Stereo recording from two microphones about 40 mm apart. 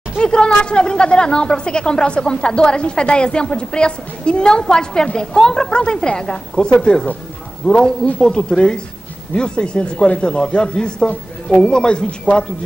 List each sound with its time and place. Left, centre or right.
0.2 s a man's voice: left